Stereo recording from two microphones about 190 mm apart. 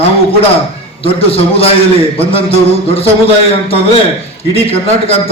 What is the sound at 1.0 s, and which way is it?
Speech, 30° left (ahead or behind).